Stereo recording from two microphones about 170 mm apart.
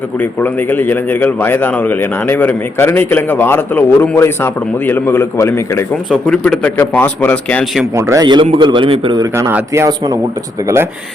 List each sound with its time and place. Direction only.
0.2 s a man's voice: 10° left (ahead or behind)
7.9 s a man's voice: 15° right (ahead or behind)
9.3 s speech: 15° right (ahead or behind)